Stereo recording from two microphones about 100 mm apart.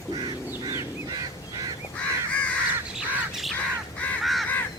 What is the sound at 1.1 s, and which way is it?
Crow, 40° right (ahead or behind).